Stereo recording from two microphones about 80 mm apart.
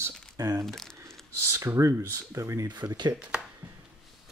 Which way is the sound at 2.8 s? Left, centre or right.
Right.